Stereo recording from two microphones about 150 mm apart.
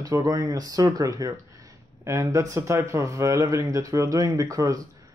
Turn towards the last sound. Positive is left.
turn(degrees=-20)  # may be behind; listen again after turning